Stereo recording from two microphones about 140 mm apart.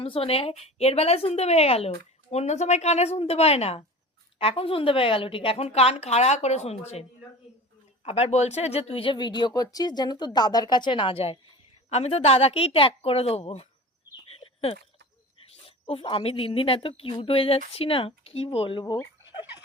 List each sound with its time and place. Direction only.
0.0 s a woman's voice: 45° left (ahead or behind)
8.0 s a woman's voice: 50° left (ahead or behind)
14.3 s a sound: 45° left (ahead or behind)
15.6 s speech: 40° left (ahead or behind)